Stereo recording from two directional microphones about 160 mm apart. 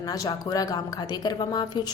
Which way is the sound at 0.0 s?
25° left (ahead or behind).